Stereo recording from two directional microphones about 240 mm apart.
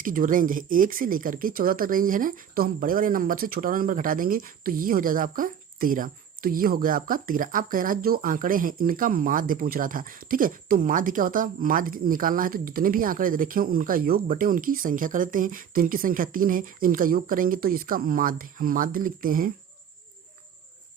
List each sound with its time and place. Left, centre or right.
0.0 s speech: right